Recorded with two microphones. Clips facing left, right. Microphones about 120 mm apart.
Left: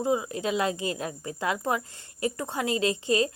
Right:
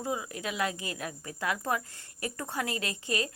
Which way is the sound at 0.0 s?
25° left (ahead or behind).